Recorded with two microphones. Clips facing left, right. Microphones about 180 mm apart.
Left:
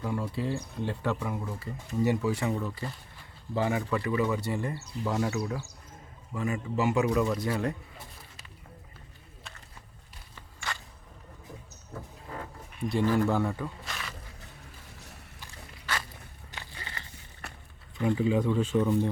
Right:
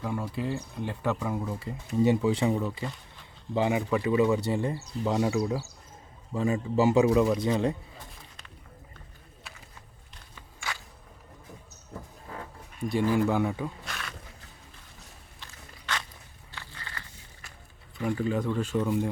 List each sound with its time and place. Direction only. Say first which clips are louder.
0.2 s speech: even; 15° right (ahead or behind)
1.3 s a man's voice: right 3 dB; 25° right (ahead or behind)
10.3 s walk: even; 5° right (ahead or behind)
12.8 s speech: right 1 dB; centre (ahead or behind)
15.9 s a sound: even; 5° left (ahead or behind)
17.4 s a sound: left 9 dB; 65° left (ahead or behind)
18.2 s speech: left 2 dB; 5° left (ahead or behind)